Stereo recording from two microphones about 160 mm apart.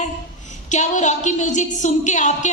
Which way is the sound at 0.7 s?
50° left (ahead or behind).